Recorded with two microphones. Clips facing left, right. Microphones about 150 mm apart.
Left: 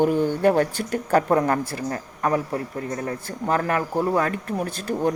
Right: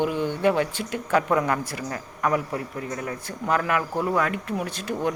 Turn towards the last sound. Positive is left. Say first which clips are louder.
# left 3 dB
turn(degrees=35)  # may be behind; listen again after turning